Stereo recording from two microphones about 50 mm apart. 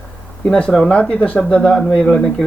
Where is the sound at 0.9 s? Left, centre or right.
Left.